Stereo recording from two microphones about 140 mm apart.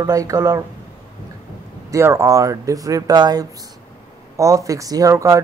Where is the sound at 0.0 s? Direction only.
20° right (ahead or behind).